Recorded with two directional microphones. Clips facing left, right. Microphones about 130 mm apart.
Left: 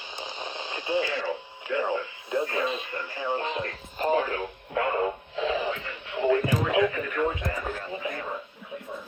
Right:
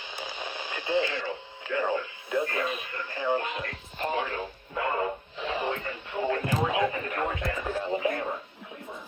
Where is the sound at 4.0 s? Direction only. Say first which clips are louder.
Left 5 dB; 40° left (ahead or behind).